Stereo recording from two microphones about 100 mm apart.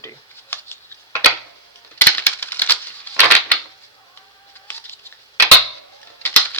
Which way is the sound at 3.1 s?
15° left (ahead or behind).